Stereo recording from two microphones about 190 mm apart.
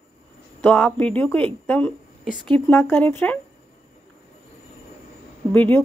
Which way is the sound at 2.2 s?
Centre (ahead or behind).